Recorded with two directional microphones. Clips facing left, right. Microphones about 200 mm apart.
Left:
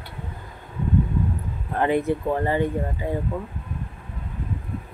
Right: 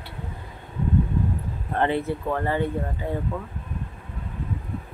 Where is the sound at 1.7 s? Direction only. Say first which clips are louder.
Left 2 dB; 15° left (ahead or behind).